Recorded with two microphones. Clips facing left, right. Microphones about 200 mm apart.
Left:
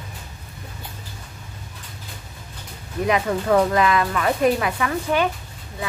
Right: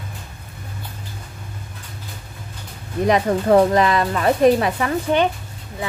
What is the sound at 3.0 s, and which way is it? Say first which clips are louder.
A woman's voice: right 4 dB; 35° right (ahead or behind).